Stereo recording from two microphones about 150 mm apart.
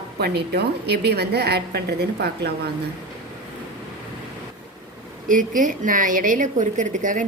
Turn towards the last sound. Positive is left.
turn(degrees=-60)  # may be behind; listen again after turning